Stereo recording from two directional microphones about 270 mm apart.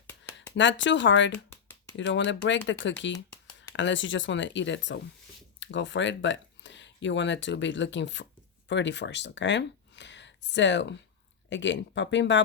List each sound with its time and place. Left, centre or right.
0.5 s speech: left